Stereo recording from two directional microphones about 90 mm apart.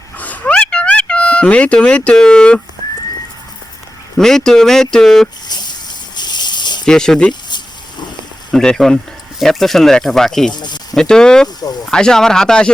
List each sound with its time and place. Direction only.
0.2 s a sound: 15° left (ahead or behind)
4.2 s speech: 5° left (ahead or behind)
6.1 s a sound: 55° left (ahead or behind)
6.8 s speech: 5° left (ahead or behind)
8.5 s speech: 5° left (ahead or behind)
10.5 s speech: 55° left (ahead or behind)
10.9 s speech: 10° left (ahead or behind)